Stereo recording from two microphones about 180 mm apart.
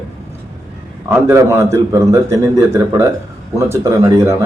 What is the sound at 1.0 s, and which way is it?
Speech, 15° right (ahead or behind).